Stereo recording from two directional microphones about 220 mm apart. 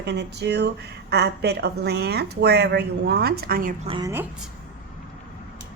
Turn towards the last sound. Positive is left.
turn(degrees=-20)  # may be behind; listen again after turning